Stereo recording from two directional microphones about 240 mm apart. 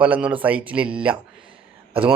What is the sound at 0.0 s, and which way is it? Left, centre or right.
Speech, centre.